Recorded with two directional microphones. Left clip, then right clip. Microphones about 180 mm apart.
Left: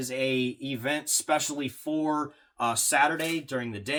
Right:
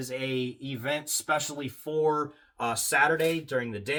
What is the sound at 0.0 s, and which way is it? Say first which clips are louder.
Speech: left 4 dB; 20° left (ahead or behind).